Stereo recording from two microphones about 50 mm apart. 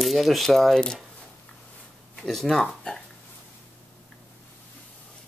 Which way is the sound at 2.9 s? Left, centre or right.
Centre.